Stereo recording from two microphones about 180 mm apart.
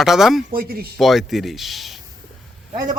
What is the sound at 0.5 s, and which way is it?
Speech, 55° right (ahead or behind).